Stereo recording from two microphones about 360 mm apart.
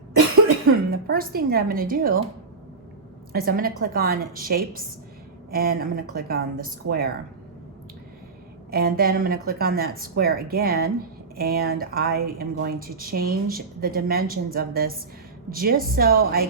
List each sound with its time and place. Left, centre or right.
0.9 s a woman's voice: right
3.3 s a woman's voice: right
8.7 s a woman's voice: right